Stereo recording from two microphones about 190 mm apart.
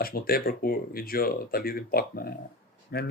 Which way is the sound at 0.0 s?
50° left (ahead or behind).